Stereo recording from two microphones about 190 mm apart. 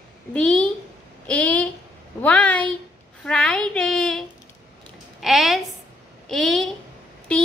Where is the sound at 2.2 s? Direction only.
5° left (ahead or behind).